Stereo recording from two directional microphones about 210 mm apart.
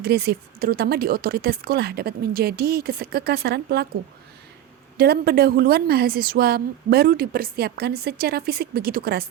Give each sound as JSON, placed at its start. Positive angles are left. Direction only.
{"t": 0.0, "sound": "a woman's voice", "side_deg": -50}
{"t": 4.9, "sound": "a woman's voice", "side_deg": -50}